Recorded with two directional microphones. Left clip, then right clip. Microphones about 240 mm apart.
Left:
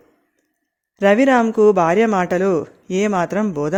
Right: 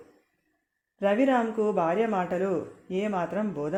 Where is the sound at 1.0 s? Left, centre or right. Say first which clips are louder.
Left 10 dB; left.